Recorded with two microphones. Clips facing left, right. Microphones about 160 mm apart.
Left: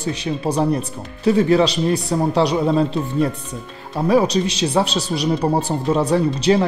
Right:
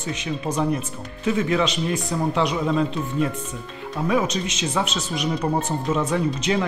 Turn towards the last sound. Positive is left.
turn(degrees=35)  # may be behind; listen again after turning